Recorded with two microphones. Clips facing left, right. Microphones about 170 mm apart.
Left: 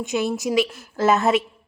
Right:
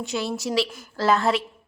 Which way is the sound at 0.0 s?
20° left (ahead or behind).